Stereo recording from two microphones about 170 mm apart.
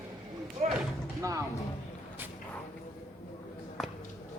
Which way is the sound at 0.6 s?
45° right (ahead or behind).